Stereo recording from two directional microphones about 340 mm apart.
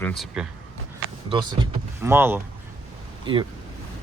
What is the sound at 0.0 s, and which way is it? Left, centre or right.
Speech, centre.